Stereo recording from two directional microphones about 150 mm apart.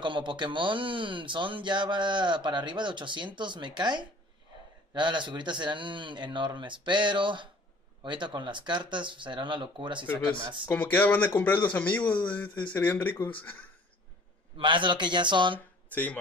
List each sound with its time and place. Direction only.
0.0 s speech: 30° right (ahead or behind)
10.7 s speech: 10° left (ahead or behind)
14.6 s speech: 35° right (ahead or behind)
15.9 s speech: 10° left (ahead or behind)